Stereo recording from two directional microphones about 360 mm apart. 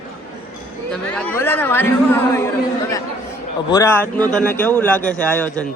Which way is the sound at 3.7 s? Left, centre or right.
Centre.